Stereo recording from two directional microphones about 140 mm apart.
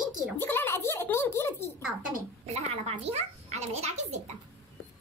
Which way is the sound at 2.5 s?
45° right (ahead or behind).